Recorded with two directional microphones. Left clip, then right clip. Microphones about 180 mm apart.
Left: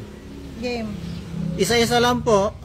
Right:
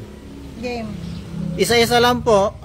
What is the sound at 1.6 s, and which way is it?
Speech, 10° left (ahead or behind).